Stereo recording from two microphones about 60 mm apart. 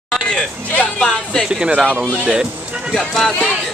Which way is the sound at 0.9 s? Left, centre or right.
Centre.